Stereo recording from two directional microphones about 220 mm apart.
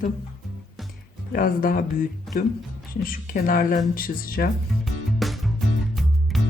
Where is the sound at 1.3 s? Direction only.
40° left (ahead or behind).